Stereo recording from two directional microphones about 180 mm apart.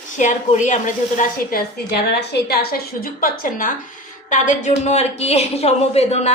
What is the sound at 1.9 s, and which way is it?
A woman's voice, 65° left (ahead or behind).